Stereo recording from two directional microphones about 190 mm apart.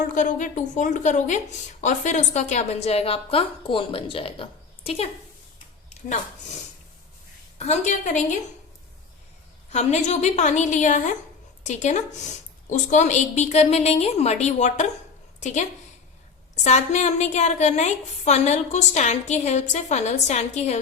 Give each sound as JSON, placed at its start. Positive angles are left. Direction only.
{"t": 0.1, "sound": "a woman's voice", "side_deg": 45}
{"t": 7.6, "sound": "a woman's voice", "side_deg": 35}
{"t": 9.6, "sound": "a woman's voice", "side_deg": 35}
{"t": 16.6, "sound": "a woman's voice", "side_deg": 35}